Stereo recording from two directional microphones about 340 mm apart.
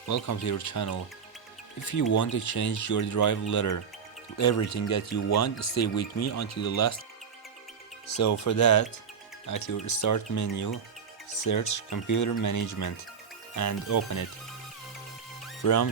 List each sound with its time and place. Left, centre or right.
0.1 s speech: left
8.2 s speech: left
15.6 s speech: left